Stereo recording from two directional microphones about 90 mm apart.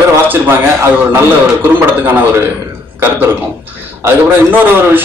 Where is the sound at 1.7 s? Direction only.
25° right (ahead or behind).